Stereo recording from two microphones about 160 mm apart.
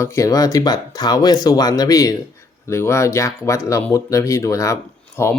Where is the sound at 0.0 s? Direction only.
20° left (ahead or behind).